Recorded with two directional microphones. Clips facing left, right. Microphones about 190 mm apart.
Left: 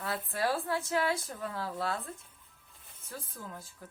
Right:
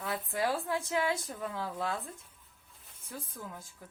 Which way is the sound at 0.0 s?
15° right (ahead or behind).